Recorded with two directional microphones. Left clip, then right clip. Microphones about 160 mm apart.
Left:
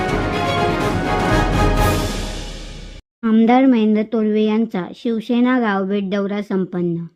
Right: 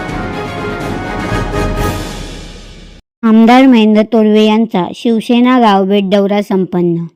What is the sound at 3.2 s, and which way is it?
A woman's voice, 35° right (ahead or behind).